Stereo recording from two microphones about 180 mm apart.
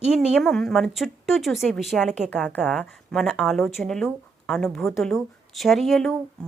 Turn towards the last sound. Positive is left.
turn(degrees=5)  # may be behind; listen again after turning